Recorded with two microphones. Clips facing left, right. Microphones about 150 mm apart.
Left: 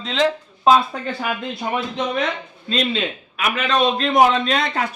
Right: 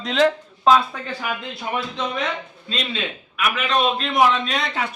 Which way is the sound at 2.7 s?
40° left (ahead or behind).